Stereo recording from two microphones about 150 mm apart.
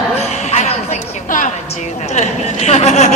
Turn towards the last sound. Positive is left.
turn(degrees=50)  # may be behind; listen again after turning